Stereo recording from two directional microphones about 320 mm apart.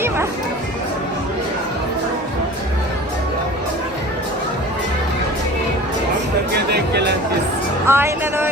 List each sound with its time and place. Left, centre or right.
6.5 s music: right
7.9 s music: centre